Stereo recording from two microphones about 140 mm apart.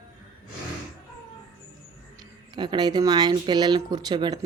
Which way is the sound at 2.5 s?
30° right (ahead or behind).